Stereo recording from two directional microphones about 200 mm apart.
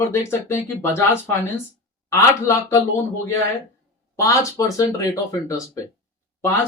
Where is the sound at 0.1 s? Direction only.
10° left (ahead or behind).